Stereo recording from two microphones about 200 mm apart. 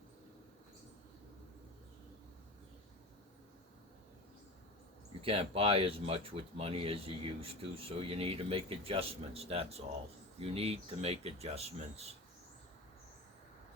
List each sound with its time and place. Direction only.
5.2 s speech: 30° right (ahead or behind)